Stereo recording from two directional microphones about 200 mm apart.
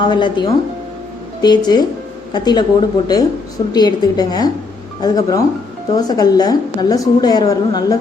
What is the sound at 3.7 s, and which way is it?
A woman's voice, 20° left (ahead or behind).